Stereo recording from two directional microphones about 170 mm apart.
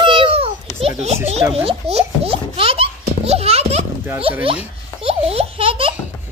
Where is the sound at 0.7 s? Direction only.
35° right (ahead or behind).